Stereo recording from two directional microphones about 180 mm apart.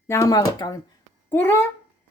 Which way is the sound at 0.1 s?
20° left (ahead or behind).